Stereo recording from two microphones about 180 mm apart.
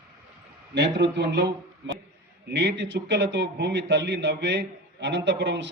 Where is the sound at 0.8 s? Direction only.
75° right (ahead or behind).